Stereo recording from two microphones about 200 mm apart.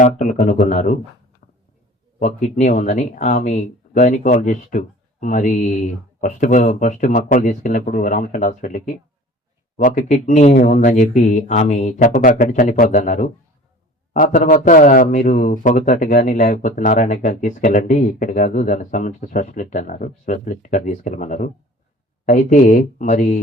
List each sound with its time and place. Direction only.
0.0 s speech: 40° left (ahead or behind)
1.4 s a sound: 45° left (ahead or behind)
2.1 s speech: 40° left (ahead or behind)